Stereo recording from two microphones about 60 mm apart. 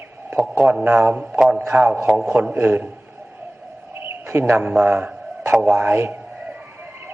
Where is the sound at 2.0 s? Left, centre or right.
Centre.